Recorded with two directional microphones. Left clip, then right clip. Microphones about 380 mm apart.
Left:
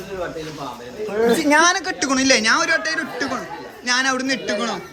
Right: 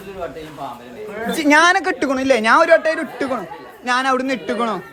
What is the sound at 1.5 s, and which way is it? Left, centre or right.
Speech, centre.